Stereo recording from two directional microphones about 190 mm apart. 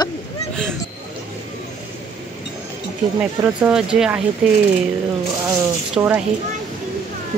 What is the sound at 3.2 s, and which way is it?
Speech, 5° right (ahead or behind).